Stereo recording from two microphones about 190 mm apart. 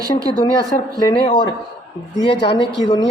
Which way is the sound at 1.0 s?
25° left (ahead or behind).